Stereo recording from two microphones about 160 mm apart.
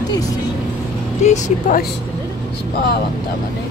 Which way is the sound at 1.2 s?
45° left (ahead or behind).